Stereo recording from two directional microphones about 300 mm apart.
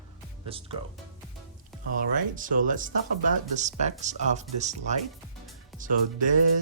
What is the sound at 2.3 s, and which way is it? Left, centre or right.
Speech, right.